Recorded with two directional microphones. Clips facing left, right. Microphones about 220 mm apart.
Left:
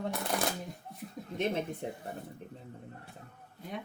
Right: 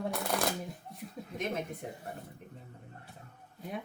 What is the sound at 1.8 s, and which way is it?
Speech, 30° left (ahead or behind).